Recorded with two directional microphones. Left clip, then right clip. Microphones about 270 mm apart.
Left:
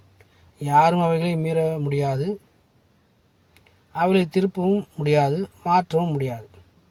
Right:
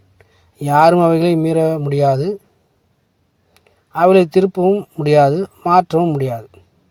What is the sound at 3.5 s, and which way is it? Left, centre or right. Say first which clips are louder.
Speech: right 7 dB; right.